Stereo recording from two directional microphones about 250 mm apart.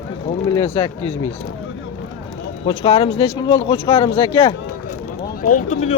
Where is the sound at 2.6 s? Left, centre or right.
Left.